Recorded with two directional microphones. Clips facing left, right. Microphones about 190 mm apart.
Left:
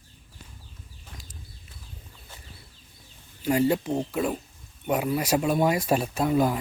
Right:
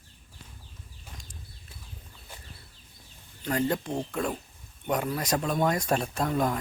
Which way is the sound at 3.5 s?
10° left (ahead or behind).